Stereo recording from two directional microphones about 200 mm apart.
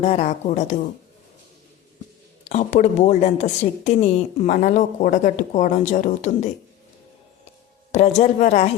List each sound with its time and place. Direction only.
0.0 s a woman's voice: 35° left (ahead or behind)
2.4 s a woman's voice: 30° left (ahead or behind)
7.9 s a woman's voice: 35° left (ahead or behind)